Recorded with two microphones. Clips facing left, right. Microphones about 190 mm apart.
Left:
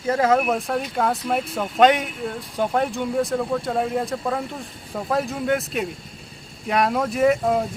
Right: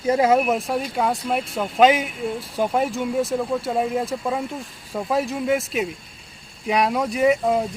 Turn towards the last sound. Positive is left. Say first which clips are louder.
# even
turn(degrees=0)  # may be behind; listen again after turning